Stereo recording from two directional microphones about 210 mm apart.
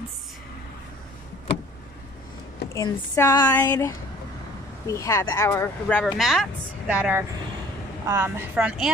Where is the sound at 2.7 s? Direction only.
15° left (ahead or behind).